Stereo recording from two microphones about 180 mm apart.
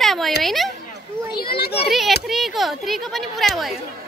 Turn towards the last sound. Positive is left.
turn(degrees=0)  # may be behind; listen again after turning